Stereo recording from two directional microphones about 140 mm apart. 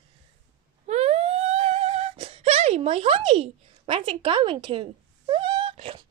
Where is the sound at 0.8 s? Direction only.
50° right (ahead or behind).